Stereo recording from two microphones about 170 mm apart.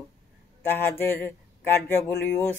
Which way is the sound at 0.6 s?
10° left (ahead or behind).